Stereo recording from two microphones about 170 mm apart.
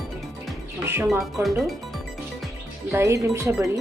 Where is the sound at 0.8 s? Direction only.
15° right (ahead or behind).